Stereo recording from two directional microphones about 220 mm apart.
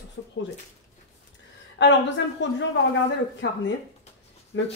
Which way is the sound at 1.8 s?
55° left (ahead or behind).